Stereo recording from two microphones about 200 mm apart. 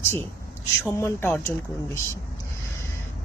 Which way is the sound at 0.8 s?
15° left (ahead or behind).